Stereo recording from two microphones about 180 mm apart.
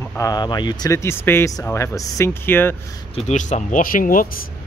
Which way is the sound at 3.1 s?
40° left (ahead or behind).